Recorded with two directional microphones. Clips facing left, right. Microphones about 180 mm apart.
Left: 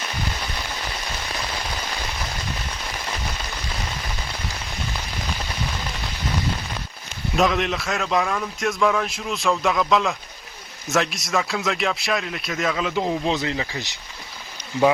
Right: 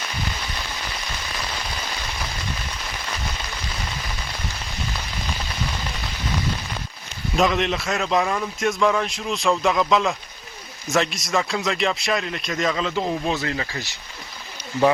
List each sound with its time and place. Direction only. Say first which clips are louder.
7.3 s speech: even; centre (ahead or behind)
12.9 s speech: left 1 dB; 15° left (ahead or behind)